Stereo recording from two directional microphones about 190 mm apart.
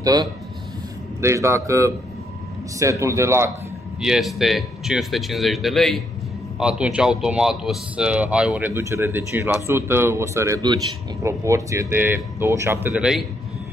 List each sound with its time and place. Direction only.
0.0 s speech: 20° right (ahead or behind)
4.0 s speech: centre (ahead or behind)